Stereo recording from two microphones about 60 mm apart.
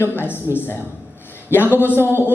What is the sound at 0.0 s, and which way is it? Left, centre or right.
Speech, left.